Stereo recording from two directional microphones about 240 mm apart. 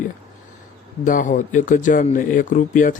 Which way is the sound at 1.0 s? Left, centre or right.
Left.